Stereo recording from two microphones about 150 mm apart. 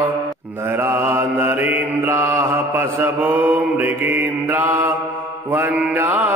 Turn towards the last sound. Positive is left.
turn(degrees=-15)  # may be behind; listen again after turning